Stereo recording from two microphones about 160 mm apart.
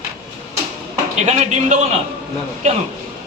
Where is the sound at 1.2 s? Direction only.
45° right (ahead or behind).